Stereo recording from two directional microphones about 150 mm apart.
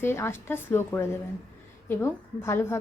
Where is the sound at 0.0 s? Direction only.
15° left (ahead or behind).